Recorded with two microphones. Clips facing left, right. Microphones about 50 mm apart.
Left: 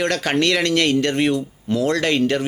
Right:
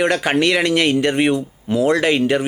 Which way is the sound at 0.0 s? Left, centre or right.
Centre.